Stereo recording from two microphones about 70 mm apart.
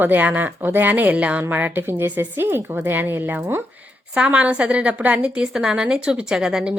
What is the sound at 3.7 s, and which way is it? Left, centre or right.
A woman's voice, centre.